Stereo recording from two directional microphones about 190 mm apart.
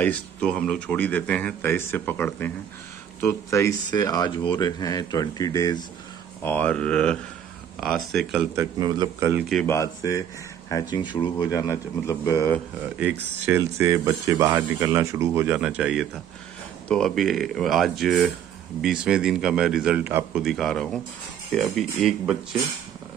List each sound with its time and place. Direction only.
0.0 s speech: 5° left (ahead or behind)
6.4 s a man's voice: 10° left (ahead or behind)
8.5 s speech: 20° right (ahead or behind)
9.5 s speech: 10° left (ahead or behind)
13.5 s a man's voice: 15° right (ahead or behind)
20.4 s a man's voice: centre (ahead or behind)